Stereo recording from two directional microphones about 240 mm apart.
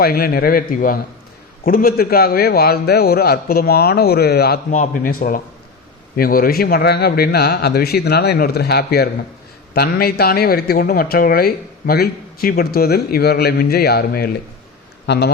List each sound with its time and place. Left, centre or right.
0.0 s speech: left